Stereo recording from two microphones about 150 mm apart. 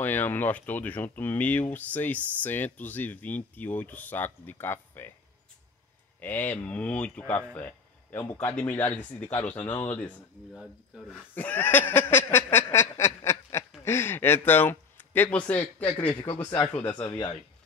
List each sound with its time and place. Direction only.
0.0 s speech: 15° left (ahead or behind)
6.1 s speech: 10° left (ahead or behind)
10.5 s speech: centre (ahead or behind)
11.3 s a sound: 10° left (ahead or behind)
13.8 s speech: 15° left (ahead or behind)
16.9 s speech: 30° left (ahead or behind)